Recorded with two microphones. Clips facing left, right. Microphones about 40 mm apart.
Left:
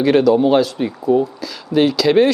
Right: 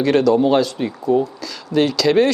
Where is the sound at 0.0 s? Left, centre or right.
Centre.